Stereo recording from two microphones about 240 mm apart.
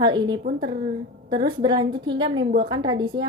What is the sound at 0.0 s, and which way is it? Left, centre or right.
Speech, centre.